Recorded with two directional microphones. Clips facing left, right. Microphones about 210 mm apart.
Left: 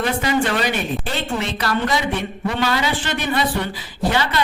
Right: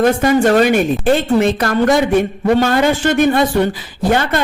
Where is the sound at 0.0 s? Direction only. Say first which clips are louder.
Right 8 dB; 45° right (ahead or behind).